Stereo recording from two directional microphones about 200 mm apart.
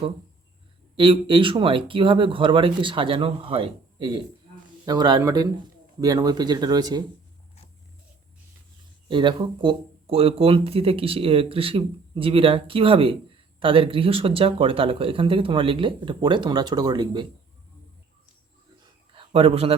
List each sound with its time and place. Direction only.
0.9 s speech: 25° right (ahead or behind)
9.0 s speech: 25° right (ahead or behind)
19.1 s a sound: 30° right (ahead or behind)